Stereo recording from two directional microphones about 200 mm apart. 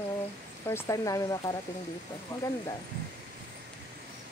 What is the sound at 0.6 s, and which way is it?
Speech, 15° left (ahead or behind).